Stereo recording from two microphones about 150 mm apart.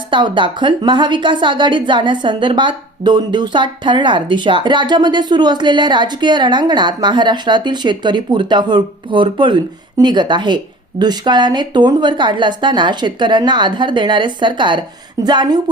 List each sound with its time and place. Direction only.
0.1 s a woman's voice: 30° right (ahead or behind)